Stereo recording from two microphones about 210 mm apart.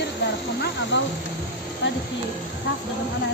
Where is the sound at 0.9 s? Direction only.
55° left (ahead or behind).